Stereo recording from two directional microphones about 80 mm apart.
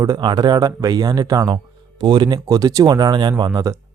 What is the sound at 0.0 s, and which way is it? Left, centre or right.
Speech, right.